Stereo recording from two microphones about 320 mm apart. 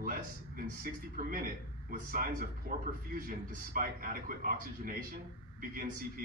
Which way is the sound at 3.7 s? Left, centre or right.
Right.